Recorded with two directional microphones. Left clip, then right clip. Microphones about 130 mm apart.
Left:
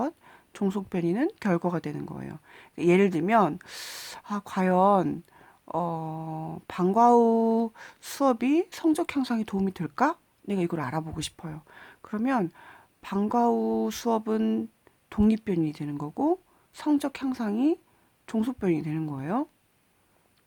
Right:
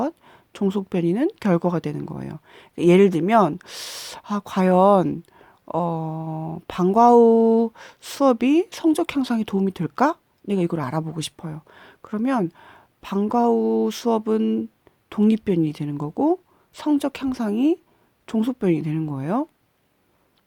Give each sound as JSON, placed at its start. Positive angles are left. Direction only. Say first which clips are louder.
{"t": 0.0, "sound": "speech", "louder": "right 5 dB", "side_deg": -30}